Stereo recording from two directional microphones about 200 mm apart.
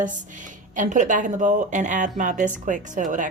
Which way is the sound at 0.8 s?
40° right (ahead or behind).